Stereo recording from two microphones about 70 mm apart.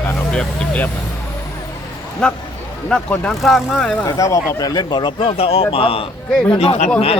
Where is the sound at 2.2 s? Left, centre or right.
Centre.